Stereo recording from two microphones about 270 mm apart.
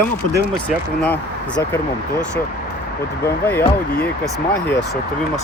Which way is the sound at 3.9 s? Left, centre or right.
Left.